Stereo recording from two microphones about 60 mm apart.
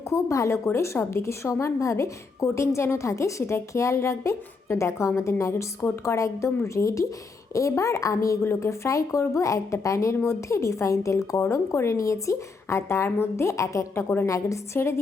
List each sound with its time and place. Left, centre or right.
0.1 s a woman's voice: left
8.4 s a woman's voice: left